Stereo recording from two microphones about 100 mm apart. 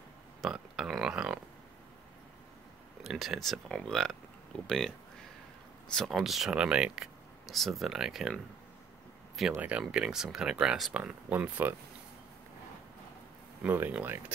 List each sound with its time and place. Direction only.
0.4 s a sound: 5° right (ahead or behind)
3.0 s speech: 5° right (ahead or behind)
5.9 s speech: centre (ahead or behind)
9.6 s speech: 15° right (ahead or behind)
13.6 s speech: 20° right (ahead or behind)